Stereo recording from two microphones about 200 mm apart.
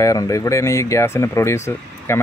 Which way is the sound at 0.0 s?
15° left (ahead or behind).